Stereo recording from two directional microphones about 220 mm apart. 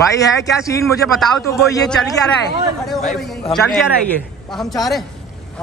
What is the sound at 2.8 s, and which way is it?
A man's voice, centre (ahead or behind).